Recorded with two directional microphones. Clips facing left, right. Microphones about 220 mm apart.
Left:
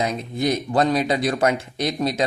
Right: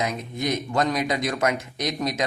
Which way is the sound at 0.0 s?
30° left (ahead or behind).